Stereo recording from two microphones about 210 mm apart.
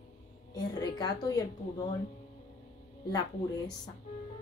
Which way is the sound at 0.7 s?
20° left (ahead or behind).